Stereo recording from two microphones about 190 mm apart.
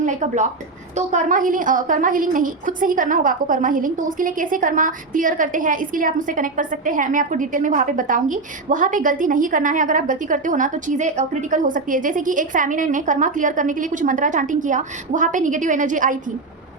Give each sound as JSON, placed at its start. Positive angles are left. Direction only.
{"t": 0.0, "sound": "a woman's voice", "side_deg": -40}